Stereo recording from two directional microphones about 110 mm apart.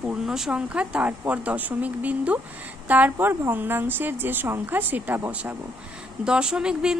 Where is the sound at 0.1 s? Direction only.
5° right (ahead or behind).